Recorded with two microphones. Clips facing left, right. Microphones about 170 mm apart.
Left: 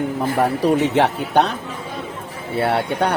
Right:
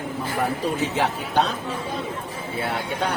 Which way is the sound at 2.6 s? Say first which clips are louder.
Left 7 dB; 65° left (ahead or behind).